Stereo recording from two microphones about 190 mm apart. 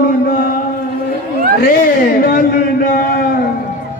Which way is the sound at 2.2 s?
50° left (ahead or behind).